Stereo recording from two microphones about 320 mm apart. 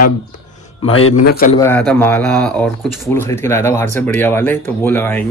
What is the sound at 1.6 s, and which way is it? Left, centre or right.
Speech, centre.